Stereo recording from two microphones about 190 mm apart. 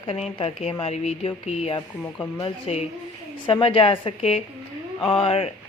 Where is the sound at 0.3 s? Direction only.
30° left (ahead or behind).